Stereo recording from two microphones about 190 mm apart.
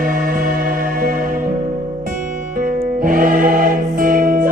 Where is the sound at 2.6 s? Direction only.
45° right (ahead or behind).